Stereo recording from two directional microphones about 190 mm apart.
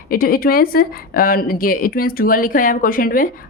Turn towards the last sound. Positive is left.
turn(degrees=50)  # may be behind; listen again after turning